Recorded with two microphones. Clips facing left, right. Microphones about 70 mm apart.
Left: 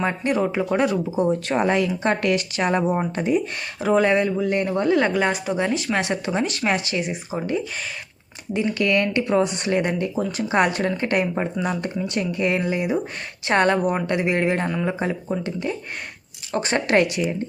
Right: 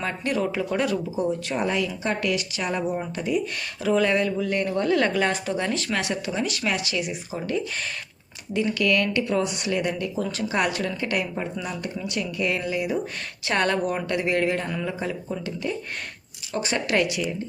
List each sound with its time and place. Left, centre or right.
0.0 s a woman's voice: left
1.3 s a woman's voice: left
3.8 s a woman's voice: left
5.9 s a woman's voice: left
16.5 s speech: left